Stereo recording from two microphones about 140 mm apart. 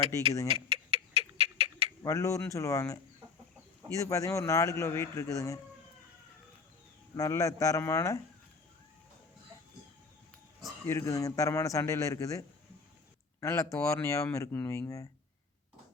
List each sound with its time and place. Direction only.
0.0 s speech: 40° right (ahead or behind)
0.7 s owl: 45° right (ahead or behind)
2.0 s a man's voice: 20° left (ahead or behind)
7.2 s a man's voice: 20° left (ahead or behind)
10.8 s a man's voice: 20° left (ahead or behind)